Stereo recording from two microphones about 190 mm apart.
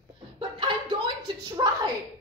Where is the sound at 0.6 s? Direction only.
25° right (ahead or behind).